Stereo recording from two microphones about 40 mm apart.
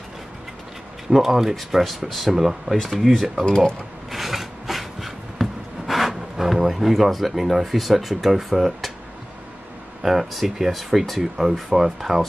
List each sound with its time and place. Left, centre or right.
1.1 s speech: centre
3.0 s speech: centre
4.1 s wood: centre
10.0 s speech: centre